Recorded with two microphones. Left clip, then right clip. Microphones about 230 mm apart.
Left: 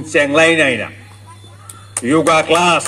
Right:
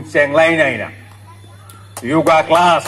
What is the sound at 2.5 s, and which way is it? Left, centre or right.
Speech, left.